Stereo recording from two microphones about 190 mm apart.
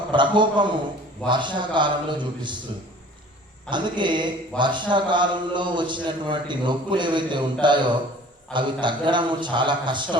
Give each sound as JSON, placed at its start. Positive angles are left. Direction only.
{"t": 0.1, "sound": "a man's voice", "side_deg": -25}
{"t": 3.7, "sound": "a man's voice", "side_deg": -25}